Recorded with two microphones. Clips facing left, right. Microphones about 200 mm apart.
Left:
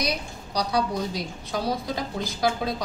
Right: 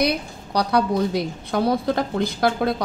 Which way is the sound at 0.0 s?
60° right (ahead or behind).